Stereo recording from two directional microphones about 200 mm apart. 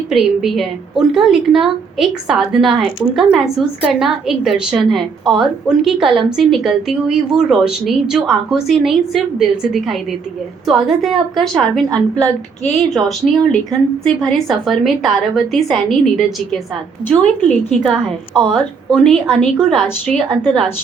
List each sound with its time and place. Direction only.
0.1 s a woman's voice: centre (ahead or behind)